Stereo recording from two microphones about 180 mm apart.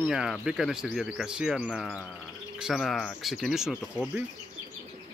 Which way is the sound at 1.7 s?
5° left (ahead or behind).